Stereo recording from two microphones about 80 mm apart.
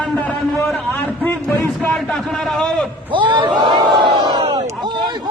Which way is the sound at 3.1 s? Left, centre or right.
Right.